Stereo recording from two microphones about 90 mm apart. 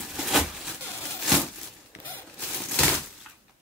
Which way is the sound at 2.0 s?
20° left (ahead or behind).